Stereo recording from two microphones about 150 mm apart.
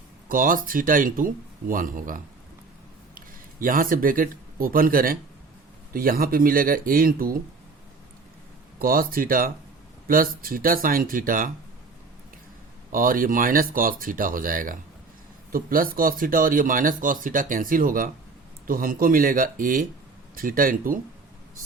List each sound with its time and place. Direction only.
0.3 s speech: 65° right (ahead or behind)
8.8 s speech: 75° right (ahead or behind)
12.9 s speech: 65° right (ahead or behind)